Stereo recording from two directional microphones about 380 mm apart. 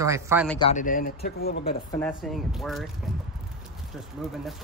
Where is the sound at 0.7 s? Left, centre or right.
Left.